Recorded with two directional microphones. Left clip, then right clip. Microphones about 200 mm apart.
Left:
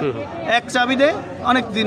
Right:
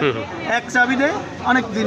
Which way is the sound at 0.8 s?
25° left (ahead or behind).